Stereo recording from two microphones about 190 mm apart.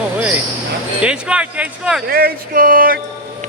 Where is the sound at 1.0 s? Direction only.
5° right (ahead or behind).